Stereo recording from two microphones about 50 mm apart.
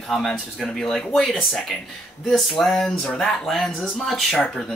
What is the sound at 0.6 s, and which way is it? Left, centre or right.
Speech, centre.